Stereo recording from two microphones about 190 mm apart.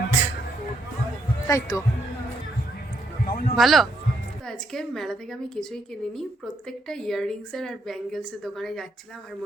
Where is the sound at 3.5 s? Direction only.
Centre (ahead or behind).